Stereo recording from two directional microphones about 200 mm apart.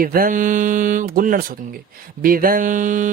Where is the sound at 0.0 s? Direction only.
45° right (ahead or behind).